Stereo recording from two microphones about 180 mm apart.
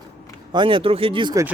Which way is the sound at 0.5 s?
30° right (ahead or behind).